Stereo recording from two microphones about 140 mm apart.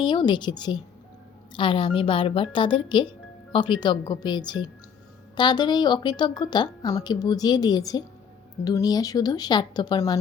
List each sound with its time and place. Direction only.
0.0 s a woman's voice: 35° left (ahead or behind)